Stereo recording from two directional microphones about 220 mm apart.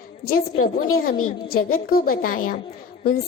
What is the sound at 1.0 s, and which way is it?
Music, 40° left (ahead or behind).